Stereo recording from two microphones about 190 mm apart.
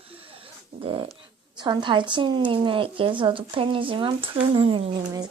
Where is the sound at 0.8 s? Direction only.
30° right (ahead or behind).